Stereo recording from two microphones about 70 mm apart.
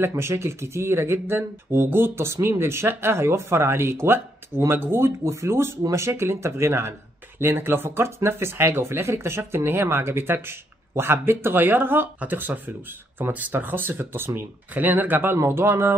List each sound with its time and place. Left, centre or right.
0.0 s speech: right